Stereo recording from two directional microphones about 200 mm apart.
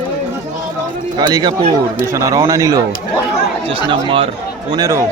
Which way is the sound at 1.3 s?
20° right (ahead or behind).